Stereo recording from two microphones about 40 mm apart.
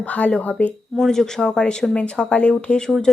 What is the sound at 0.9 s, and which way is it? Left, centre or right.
Speech, centre.